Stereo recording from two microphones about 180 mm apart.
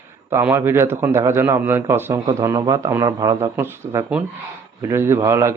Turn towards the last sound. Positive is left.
turn(degrees=-15)  # may be behind; listen again after turning